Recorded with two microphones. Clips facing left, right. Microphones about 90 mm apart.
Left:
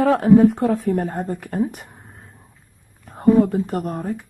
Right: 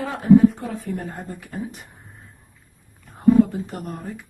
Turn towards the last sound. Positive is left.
turn(degrees=50)  # may be behind; listen again after turning